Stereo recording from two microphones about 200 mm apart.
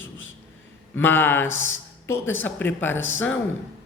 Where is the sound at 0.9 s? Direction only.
10° left (ahead or behind).